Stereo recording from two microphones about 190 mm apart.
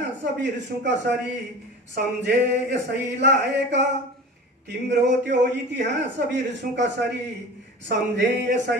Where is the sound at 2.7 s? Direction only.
65° right (ahead or behind).